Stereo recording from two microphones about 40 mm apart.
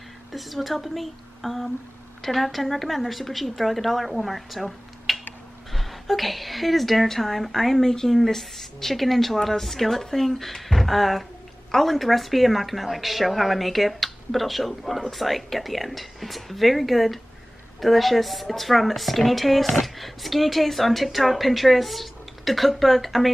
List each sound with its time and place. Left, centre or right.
0.3 s a woman's voice: centre